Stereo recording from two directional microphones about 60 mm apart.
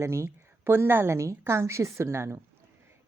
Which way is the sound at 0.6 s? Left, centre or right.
Right.